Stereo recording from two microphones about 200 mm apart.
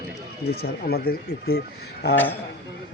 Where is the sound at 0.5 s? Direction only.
50° left (ahead or behind).